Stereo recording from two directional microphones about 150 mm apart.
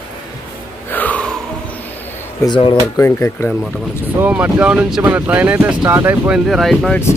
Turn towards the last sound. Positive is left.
turn(degrees=0)  # may be behind; listen again after turning